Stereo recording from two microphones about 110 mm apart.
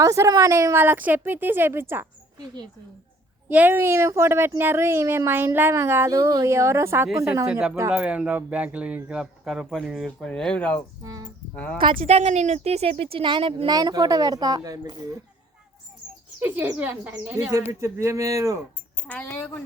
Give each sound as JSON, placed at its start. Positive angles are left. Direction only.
{"t": 0.0, "sound": "speech", "side_deg": -30}
{"t": 3.5, "sound": "speech", "side_deg": -15}
{"t": 7.4, "sound": "speech", "side_deg": -10}
{"t": 11.0, "sound": "speech", "side_deg": -30}
{"t": 11.5, "sound": "speech", "side_deg": 15}
{"t": 11.8, "sound": "speech", "side_deg": -50}
{"t": 12.0, "sound": "speech", "side_deg": -80}
{"t": 13.7, "sound": "a woman's voice", "side_deg": -35}
{"t": 16.4, "sound": "speech", "side_deg": -15}
{"t": 19.0, "sound": "a woman's voice", "side_deg": 15}